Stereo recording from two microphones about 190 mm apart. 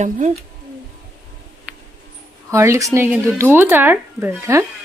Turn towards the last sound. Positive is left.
turn(degrees=-15)  # may be behind; listen again after turning